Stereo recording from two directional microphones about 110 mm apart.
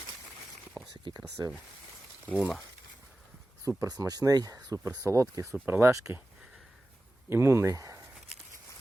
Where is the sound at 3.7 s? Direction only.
30° right (ahead or behind).